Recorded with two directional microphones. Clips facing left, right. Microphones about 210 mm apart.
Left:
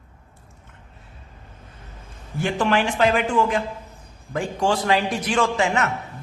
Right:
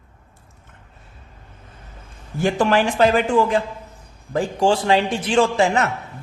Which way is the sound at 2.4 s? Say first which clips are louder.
Right 3 dB; 40° right (ahead or behind).